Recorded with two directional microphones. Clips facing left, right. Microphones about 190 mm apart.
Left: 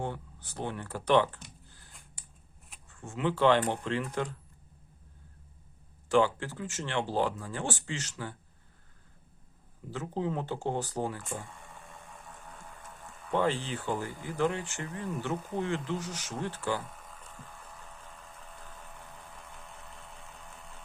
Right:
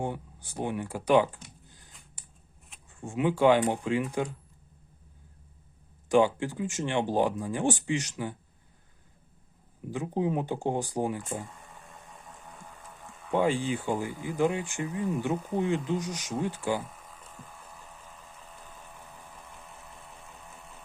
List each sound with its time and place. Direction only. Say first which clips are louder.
0.0 s speech: right 3 dB; 15° right (ahead or behind)
2.9 s speech: right 4 dB; 15° right (ahead or behind)
6.1 s speech: right 3 dB; 15° right (ahead or behind)
9.9 s speech: right 4 dB; 15° right (ahead or behind)
11.4 s a sound: even; centre (ahead or behind)
15.5 s speech: right 5 dB; 15° right (ahead or behind)
17.0 s a sound: right 1 dB; centre (ahead or behind)